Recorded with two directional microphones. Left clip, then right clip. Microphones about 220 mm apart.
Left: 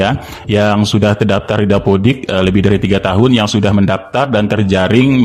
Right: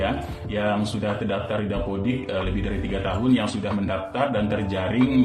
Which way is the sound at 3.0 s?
55° left (ahead or behind).